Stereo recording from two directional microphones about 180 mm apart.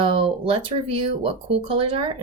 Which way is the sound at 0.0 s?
30° right (ahead or behind).